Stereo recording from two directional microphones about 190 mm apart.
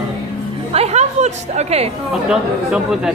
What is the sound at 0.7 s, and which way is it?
Speech, 35° right (ahead or behind).